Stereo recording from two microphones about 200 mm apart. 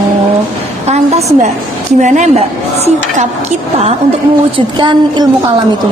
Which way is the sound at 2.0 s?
40° right (ahead or behind).